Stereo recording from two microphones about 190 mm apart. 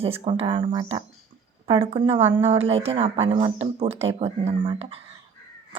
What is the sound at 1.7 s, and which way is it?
Speech, 30° right (ahead or behind).